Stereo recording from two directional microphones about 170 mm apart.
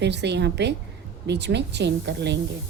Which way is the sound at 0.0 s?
90° right.